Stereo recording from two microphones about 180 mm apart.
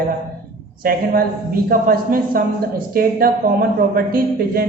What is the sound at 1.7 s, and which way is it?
A woman's voice, 55° right (ahead or behind).